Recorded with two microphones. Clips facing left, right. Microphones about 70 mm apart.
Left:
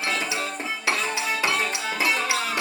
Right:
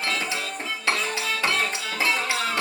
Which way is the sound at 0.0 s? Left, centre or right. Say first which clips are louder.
Left 1 dB; centre.